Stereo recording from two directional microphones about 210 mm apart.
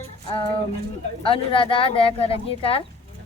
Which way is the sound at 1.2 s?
25° left (ahead or behind).